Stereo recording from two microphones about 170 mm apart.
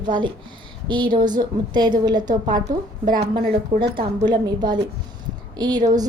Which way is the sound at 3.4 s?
65° right (ahead or behind).